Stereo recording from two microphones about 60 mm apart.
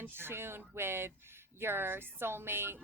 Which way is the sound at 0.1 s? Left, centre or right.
Right.